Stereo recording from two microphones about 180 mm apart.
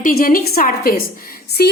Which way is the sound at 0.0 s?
55° left (ahead or behind).